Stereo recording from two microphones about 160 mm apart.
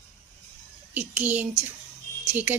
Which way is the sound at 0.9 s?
10° right (ahead or behind).